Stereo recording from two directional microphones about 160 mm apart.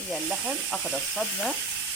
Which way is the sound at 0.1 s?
Centre (ahead or behind).